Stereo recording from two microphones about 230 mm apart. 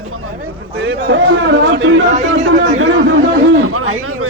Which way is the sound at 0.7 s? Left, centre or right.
Right.